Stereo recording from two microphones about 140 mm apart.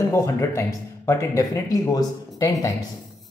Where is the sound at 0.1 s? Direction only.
20° left (ahead or behind).